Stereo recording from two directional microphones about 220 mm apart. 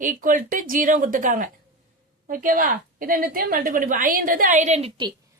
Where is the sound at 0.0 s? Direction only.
35° right (ahead or behind).